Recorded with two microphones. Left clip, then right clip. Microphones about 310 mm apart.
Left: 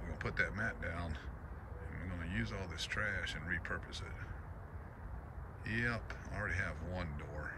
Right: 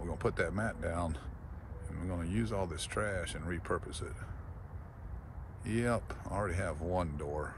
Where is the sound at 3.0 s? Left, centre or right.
Right.